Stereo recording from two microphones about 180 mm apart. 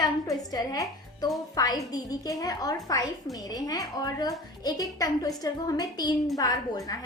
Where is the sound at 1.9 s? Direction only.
20° left (ahead or behind).